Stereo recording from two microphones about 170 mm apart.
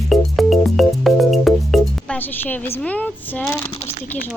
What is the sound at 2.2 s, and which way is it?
Speech, 10° left (ahead or behind).